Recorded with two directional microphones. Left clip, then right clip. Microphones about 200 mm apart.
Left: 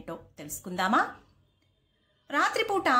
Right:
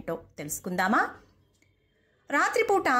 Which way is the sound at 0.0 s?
25° right (ahead or behind).